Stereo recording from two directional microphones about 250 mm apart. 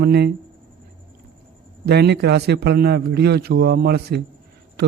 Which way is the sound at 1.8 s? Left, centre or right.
Right.